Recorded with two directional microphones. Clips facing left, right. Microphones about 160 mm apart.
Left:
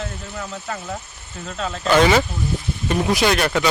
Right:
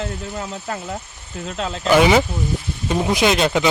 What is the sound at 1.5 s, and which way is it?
Speech, 25° right (ahead or behind).